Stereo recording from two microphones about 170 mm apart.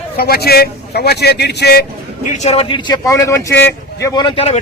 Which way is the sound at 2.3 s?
40° left (ahead or behind).